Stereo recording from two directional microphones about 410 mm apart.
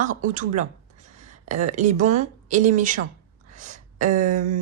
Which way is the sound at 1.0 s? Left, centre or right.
Centre.